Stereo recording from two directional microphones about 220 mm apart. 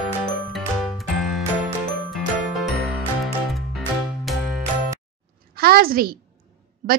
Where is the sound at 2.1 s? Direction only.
Centre (ahead or behind).